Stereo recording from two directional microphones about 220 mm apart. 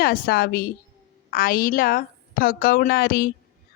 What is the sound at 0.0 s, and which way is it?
A woman's voice, 45° left (ahead or behind).